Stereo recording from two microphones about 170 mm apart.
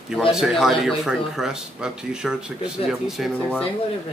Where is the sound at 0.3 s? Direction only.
5° right (ahead or behind).